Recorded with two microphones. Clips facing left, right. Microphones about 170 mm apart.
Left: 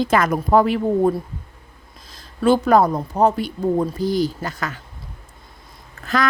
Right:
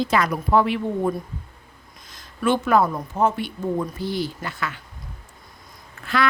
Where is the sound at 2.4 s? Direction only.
35° left (ahead or behind).